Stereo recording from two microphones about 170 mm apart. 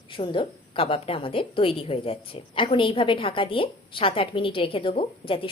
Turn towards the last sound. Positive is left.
turn(degrees=30)  # may be behind; listen again after turning